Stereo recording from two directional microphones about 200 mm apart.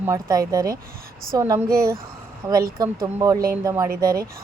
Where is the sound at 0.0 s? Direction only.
15° right (ahead or behind).